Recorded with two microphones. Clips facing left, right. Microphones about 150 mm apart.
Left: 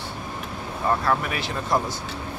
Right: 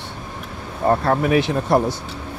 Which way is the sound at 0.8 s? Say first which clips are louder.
Right 6 dB; 50° right (ahead or behind).